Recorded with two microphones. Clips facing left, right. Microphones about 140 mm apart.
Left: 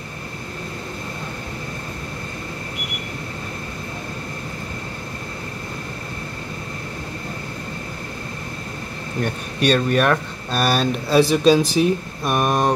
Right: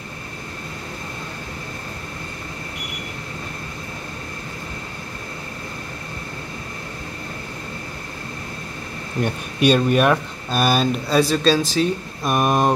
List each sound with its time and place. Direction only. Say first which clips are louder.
9.2 s speech: right 2 dB; 10° right (ahead or behind)